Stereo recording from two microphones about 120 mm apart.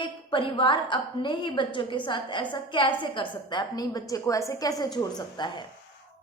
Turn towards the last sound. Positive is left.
turn(degrees=40)  # may be behind; listen again after turning